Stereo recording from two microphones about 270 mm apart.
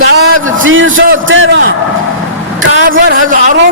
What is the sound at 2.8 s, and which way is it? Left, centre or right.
Speech, right.